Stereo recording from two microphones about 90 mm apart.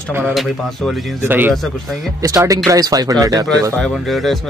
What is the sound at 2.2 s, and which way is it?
Speech, 40° right (ahead or behind).